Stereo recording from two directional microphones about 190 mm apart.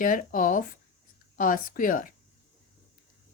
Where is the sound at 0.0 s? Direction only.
45° left (ahead or behind).